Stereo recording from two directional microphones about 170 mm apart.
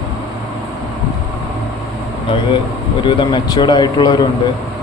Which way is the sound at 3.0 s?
30° left (ahead or behind).